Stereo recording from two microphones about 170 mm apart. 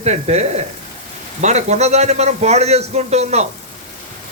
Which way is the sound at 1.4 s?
40° right (ahead or behind).